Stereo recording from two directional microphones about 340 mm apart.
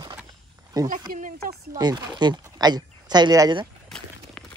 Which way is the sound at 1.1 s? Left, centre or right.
Right.